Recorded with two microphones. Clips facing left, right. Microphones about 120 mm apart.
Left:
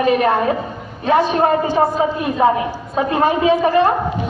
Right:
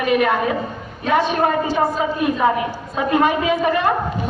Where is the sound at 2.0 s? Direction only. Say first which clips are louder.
Left 2 dB; 35° left (ahead or behind).